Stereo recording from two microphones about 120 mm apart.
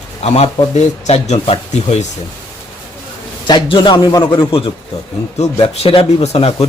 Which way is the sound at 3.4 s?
40° left (ahead or behind).